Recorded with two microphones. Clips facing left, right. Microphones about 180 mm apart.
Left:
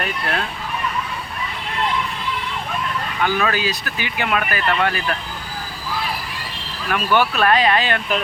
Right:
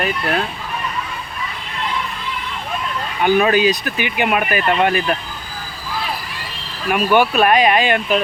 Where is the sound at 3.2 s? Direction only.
20° right (ahead or behind).